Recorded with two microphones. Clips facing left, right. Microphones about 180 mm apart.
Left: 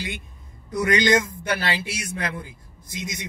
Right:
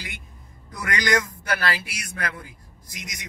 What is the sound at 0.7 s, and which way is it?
Speech, 25° left (ahead or behind).